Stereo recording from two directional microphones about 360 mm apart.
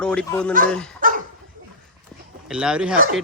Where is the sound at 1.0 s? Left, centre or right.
Right.